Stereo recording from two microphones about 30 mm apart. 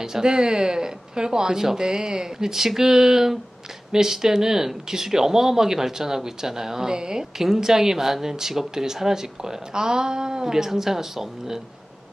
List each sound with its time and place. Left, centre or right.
0.0 s speech: right